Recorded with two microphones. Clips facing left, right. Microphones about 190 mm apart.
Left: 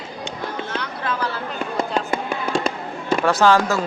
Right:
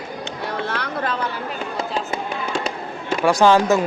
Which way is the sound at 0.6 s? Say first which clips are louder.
Right 1 dB; 65° right (ahead or behind).